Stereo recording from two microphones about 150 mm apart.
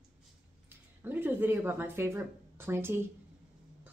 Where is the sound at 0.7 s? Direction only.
15° right (ahead or behind).